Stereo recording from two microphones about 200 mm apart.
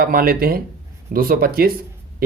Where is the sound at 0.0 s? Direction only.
45° right (ahead or behind).